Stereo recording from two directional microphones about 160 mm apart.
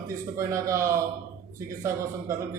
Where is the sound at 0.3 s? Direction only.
20° right (ahead or behind).